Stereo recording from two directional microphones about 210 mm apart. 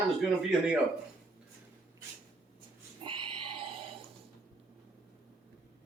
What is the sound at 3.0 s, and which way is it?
Pig, 25° right (ahead or behind).